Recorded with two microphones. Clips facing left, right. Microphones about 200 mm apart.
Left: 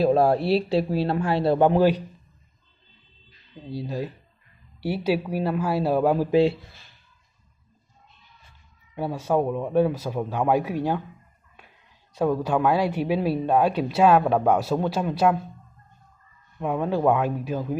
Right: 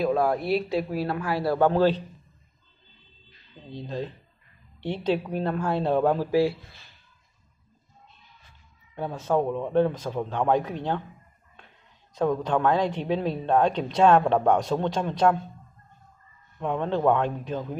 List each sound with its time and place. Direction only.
0.0 s a man's voice: 30° left (ahead or behind); by 2.0 s 15° left (ahead or behind)
3.6 s a woman's voice: 10° left (ahead or behind)
8.9 s a woman's voice: 10° left (ahead or behind)
16.5 s a woman's voice: 10° left (ahead or behind)